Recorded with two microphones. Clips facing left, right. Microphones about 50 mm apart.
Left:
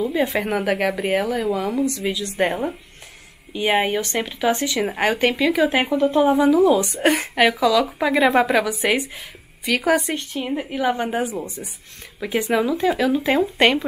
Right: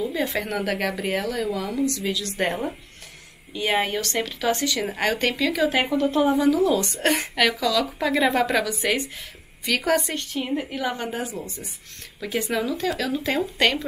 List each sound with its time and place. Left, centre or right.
0.0 s a woman's voice: left